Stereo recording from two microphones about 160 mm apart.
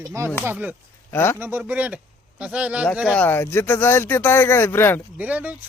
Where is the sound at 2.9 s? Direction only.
Centre (ahead or behind).